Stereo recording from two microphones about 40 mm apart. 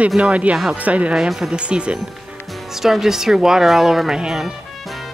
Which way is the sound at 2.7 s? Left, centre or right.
Centre.